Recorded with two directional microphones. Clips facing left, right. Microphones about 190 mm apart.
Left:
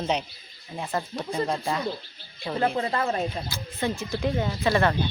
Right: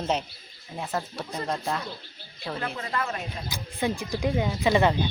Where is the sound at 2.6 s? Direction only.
35° left (ahead or behind).